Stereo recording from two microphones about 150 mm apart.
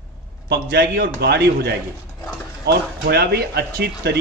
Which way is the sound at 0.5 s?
90° right.